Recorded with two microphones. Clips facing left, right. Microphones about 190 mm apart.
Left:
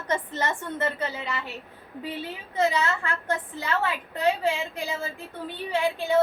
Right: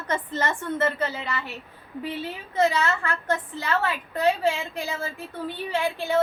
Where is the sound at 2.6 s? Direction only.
15° left (ahead or behind).